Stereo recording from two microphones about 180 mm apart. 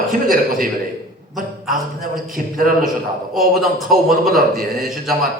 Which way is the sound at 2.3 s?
50° right (ahead or behind).